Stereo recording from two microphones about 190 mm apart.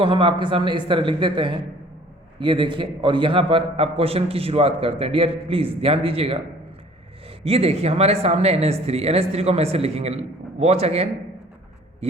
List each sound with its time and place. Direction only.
0.0 s a man's voice: 25° right (ahead or behind)